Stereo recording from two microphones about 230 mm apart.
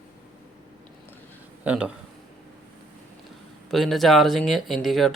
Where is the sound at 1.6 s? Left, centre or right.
Centre.